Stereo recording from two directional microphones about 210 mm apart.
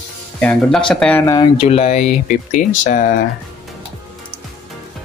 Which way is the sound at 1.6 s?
30° left (ahead or behind).